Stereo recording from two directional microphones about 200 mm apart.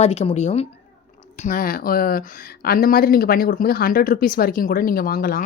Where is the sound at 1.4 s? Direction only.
45° left (ahead or behind).